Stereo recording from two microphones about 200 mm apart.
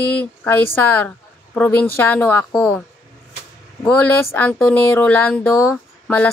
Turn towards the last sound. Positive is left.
turn(degrees=10)  # may be behind; listen again after turning